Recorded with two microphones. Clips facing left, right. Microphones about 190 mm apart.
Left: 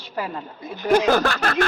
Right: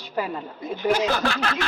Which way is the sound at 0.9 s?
55° left (ahead or behind).